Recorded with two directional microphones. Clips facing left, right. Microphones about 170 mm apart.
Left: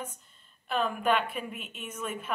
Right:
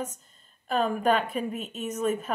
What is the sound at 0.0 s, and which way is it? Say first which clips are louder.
Speech: right 6 dB; 40° right (ahead or behind).